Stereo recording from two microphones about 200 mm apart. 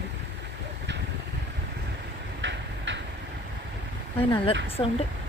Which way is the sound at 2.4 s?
65° right (ahead or behind).